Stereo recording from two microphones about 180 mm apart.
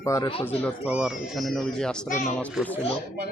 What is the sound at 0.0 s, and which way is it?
Speech, 15° left (ahead or behind).